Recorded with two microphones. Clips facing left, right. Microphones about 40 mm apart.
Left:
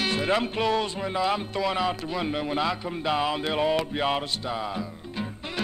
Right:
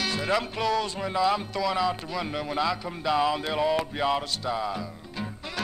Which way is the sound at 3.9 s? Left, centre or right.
Left.